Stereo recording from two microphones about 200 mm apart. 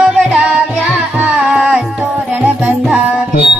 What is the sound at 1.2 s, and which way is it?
Music, 5° right (ahead or behind).